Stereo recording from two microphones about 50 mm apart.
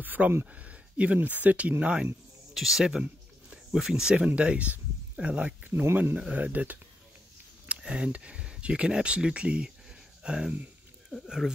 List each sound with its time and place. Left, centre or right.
0.0 s speech: right
0.5 s speech: right
2.5 s speech: centre
4.4 s speech: right
5.4 s speech: right
7.6 s speech: right